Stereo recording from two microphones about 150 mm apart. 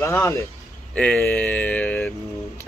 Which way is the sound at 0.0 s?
20° left (ahead or behind).